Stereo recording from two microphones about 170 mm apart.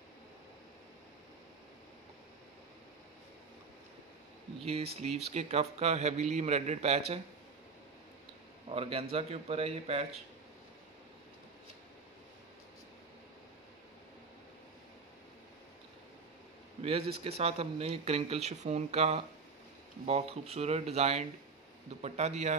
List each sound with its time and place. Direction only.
4.9 s speech: 40° right (ahead or behind)
8.6 s a man's voice: 35° right (ahead or behind)
16.8 s speech: 35° right (ahead or behind)